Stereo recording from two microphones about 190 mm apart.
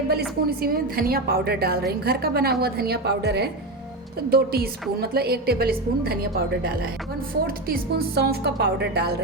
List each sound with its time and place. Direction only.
0.1 s a woman's voice: 55° right (ahead or behind)
7.4 s a woman's voice: 50° right (ahead or behind)